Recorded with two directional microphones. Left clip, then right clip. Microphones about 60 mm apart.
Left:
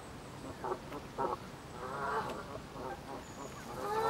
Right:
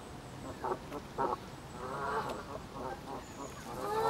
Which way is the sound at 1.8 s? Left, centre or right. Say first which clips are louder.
Right 1 dB; centre.